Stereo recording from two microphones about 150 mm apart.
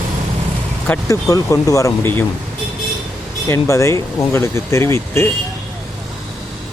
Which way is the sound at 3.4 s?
20° left (ahead or behind).